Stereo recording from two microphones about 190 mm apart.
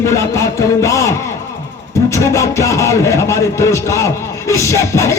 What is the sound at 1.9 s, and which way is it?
A man's voice, 15° left (ahead or behind).